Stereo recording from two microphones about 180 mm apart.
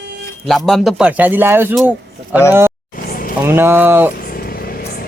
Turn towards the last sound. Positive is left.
turn(degrees=55)  # may be behind; listen again after turning